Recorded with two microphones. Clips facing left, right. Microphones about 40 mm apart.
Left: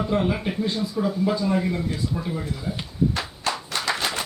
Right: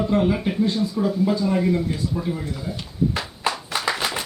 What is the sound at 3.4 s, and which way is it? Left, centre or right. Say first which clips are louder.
Clapping: right 4 dB; centre.